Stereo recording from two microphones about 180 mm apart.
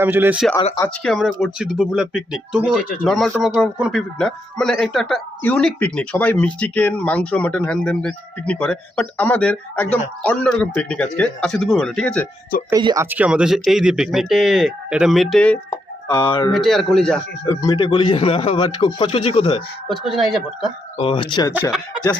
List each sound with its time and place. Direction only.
0.0 s speech: 10° right (ahead or behind)
0.5 s a man's voice: 20° left (ahead or behind)
1.0 s speech: centre (ahead or behind)
12.7 s speech: 20° right (ahead or behind); by 15.5 s 5° left (ahead or behind)
16.0 s a man's voice: 25° left (ahead or behind)
16.5 s speech: centre (ahead or behind)
17.4 s speech: 15° left (ahead or behind)
17.7 s a man's voice: 30° left (ahead or behind)
19.9 s speech: centre (ahead or behind)
21.0 s a man's voice: 30° left (ahead or behind)
21.5 s speech: 10° right (ahead or behind)